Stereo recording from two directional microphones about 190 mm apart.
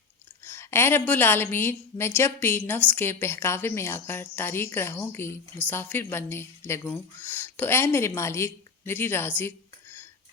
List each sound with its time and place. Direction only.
0.4 s a woman's voice: 10° left (ahead or behind)